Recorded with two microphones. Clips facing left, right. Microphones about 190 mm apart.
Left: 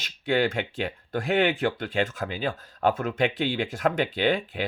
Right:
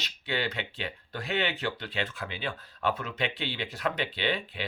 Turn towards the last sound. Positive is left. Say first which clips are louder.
# left 7 dB
turn(degrees=45)  # may be behind; listen again after turning